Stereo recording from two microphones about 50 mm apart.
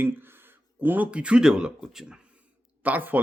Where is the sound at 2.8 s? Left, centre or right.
Right.